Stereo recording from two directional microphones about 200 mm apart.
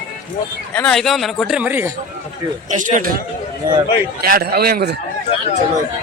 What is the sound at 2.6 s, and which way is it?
Speech, 40° right (ahead or behind).